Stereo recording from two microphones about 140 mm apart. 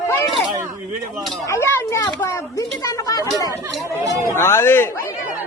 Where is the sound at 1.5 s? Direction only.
20° left (ahead or behind).